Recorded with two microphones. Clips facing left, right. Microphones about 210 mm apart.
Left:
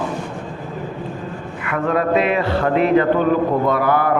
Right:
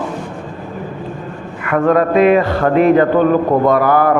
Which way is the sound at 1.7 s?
50° right (ahead or behind).